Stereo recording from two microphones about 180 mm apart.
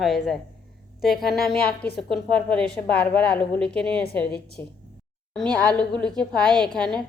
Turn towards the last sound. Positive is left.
turn(degrees=5)  # may be behind; listen again after turning